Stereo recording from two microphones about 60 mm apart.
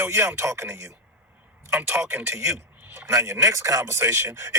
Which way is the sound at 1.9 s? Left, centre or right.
Right.